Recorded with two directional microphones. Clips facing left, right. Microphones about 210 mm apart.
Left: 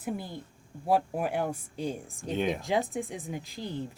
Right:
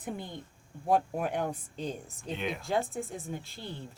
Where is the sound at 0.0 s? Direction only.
5° left (ahead or behind).